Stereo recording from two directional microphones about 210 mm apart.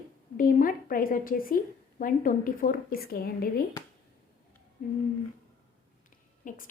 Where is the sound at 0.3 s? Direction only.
40° left (ahead or behind).